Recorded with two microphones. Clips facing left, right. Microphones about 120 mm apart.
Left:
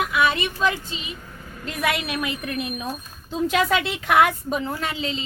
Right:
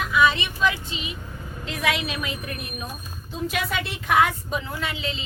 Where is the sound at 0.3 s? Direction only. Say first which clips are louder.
Left 1 dB; 45° left (ahead or behind).